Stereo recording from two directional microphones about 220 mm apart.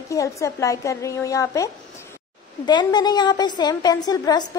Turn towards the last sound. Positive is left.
turn(degrees=20)  # may be behind; listen again after turning